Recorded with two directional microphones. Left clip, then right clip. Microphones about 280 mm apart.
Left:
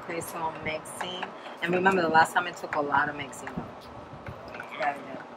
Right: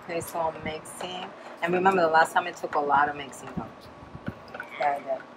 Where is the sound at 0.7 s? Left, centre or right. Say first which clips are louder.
Left 1 dB; centre.